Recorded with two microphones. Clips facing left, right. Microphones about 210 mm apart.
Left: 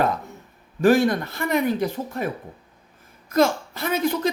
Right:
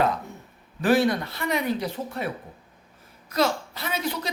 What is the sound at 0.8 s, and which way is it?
A woman's voice, 45° left (ahead or behind).